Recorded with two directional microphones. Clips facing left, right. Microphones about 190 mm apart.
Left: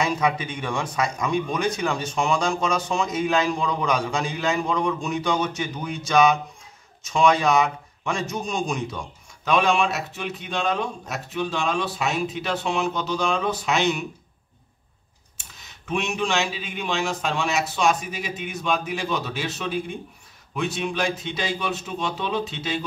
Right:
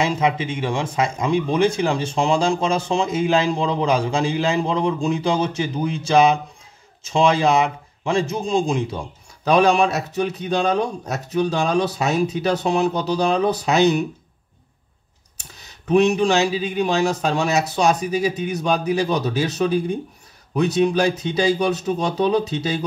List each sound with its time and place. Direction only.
0.0 s speech: 25° right (ahead or behind)
15.3 s speech: 40° right (ahead or behind)